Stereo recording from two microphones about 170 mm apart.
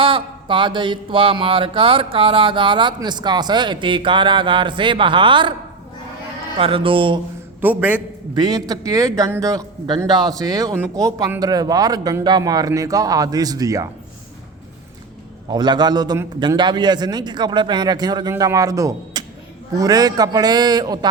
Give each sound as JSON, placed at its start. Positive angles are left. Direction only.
{"t": 0.0, "sound": "mantra", "side_deg": -30}
{"t": 6.6, "sound": "speech", "side_deg": -30}
{"t": 7.6, "sound": "a man's voice", "side_deg": -10}
{"t": 8.4, "sound": "mantra", "side_deg": -25}
{"t": 15.4, "sound": "mantra", "side_deg": -25}